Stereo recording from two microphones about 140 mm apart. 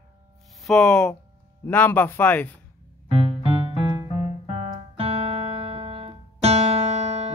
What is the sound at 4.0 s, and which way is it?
Piano, 40° right (ahead or behind).